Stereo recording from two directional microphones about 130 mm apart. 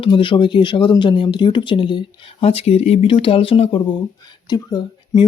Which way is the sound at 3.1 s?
40° left (ahead or behind).